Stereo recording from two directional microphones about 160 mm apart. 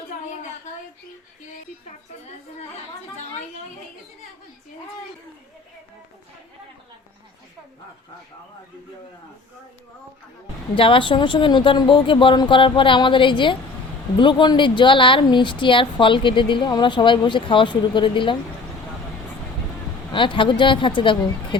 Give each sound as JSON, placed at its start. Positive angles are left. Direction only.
{"t": 10.8, "sound": "speech", "side_deg": 30}
{"t": 20.1, "sound": "speech", "side_deg": 30}